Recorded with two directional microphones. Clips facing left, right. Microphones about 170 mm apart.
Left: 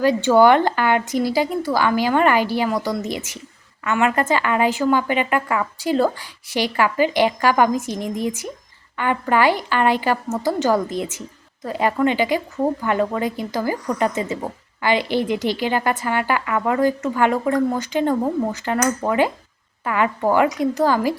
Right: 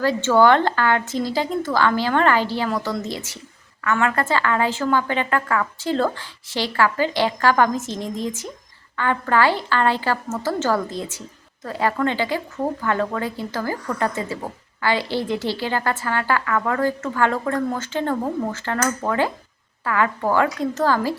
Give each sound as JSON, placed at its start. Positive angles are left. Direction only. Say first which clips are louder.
{"t": 0.0, "sound": "a woman's voice", "louder": "left 2 dB", "side_deg": 15}